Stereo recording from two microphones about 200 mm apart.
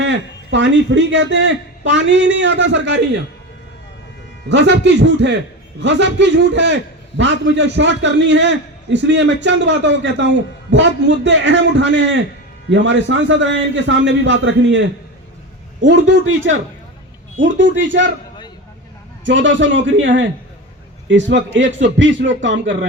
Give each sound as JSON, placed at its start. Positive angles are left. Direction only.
{"t": 0.0, "sound": "a man's voice", "side_deg": -65}
{"t": 4.4, "sound": "a man's voice", "side_deg": -60}
{"t": 15.9, "sound": "a man's voice", "side_deg": -65}
{"t": 19.2, "sound": "a man's voice", "side_deg": -65}